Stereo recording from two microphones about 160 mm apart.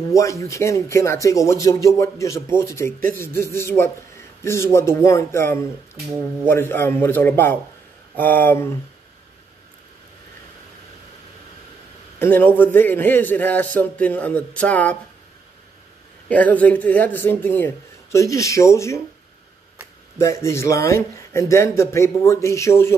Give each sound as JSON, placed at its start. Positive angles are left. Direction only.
{"t": 0.1, "sound": "a man's voice", "side_deg": 20}
{"t": 12.2, "sound": "a man's voice", "side_deg": 10}
{"t": 16.3, "sound": "a man's voice", "side_deg": 10}
{"t": 20.2, "sound": "a man's voice", "side_deg": 20}